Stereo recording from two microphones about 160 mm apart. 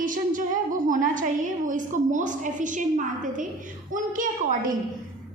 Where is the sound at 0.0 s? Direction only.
55° right (ahead or behind).